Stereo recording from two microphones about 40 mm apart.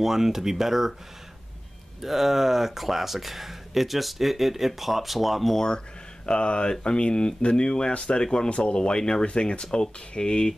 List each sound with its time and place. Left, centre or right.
0.0 s speech: centre
2.0 s speech: centre
6.2 s speech: left